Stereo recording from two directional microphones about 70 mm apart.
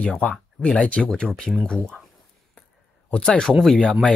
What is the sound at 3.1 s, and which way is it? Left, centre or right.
Speech, centre.